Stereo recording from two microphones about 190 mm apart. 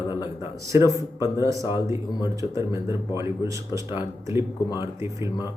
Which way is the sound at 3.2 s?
15° right (ahead or behind).